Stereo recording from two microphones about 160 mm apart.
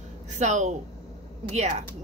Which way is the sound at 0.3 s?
50° right (ahead or behind).